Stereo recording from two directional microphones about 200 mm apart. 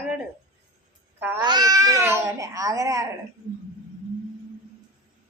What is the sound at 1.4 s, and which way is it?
Baby cry, 20° right (ahead or behind).